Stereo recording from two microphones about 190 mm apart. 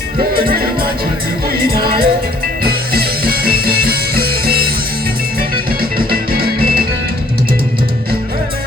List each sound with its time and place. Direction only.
0.2 s music: 50° right (ahead or behind)